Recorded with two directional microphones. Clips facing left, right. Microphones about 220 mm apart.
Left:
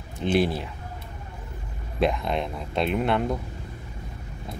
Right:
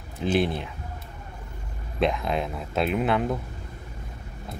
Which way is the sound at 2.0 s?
Centre (ahead or behind).